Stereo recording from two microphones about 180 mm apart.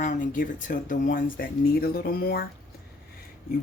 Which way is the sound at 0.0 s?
45° left (ahead or behind).